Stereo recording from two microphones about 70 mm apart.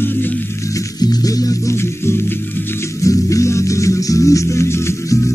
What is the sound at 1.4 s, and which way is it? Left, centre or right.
Music, left.